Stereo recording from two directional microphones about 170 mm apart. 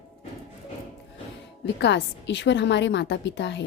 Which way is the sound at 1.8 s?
90° left.